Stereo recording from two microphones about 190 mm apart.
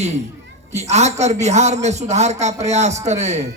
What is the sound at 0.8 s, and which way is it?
A man's voice, 35° right (ahead or behind).